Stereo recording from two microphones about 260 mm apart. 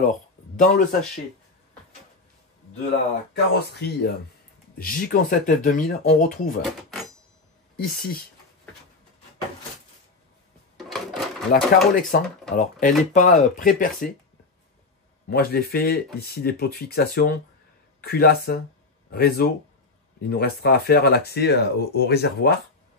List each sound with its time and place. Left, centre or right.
0.1 s a sound: left
3.5 s speech: left
7.7 s speech: left
10.8 s sewing machine: centre
11.9 s speech: left
15.2 s speech: left